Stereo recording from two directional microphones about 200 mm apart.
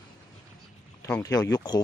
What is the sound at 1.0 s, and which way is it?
Speech, 15° left (ahead or behind).